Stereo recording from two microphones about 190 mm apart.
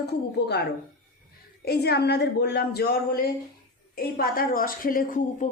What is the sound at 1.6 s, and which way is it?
A woman's voice, 55° left (ahead or behind).